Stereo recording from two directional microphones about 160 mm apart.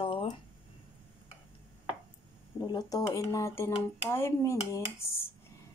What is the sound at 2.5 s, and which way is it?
Speech, 20° left (ahead or behind).